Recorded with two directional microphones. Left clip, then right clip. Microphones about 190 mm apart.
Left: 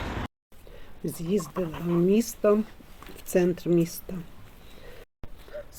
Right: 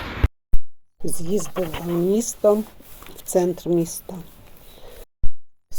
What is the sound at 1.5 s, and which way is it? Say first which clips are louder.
Speech: right 6 dB; 40° right (ahead or behind).